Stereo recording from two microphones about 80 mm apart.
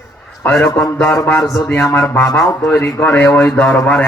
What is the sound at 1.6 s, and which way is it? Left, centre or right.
Speech, left.